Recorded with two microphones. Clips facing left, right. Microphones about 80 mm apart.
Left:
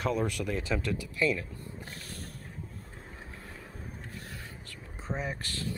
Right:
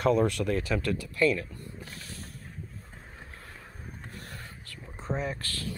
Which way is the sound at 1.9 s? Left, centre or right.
Left.